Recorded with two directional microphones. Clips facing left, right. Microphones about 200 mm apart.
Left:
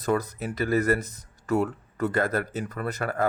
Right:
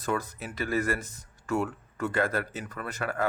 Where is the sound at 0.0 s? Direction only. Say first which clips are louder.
Left 5 dB; 40° left (ahead or behind).